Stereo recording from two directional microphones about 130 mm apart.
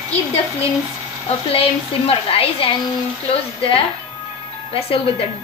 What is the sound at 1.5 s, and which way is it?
A woman's voice, 45° left (ahead or behind).